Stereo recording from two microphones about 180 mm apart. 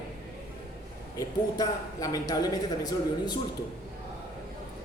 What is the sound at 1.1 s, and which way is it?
Speech, 20° left (ahead or behind).